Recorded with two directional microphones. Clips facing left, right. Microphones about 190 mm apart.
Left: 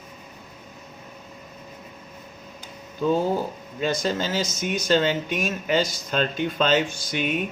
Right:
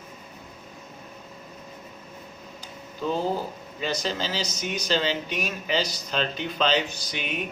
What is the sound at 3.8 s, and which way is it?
Speech, 50° left (ahead or behind).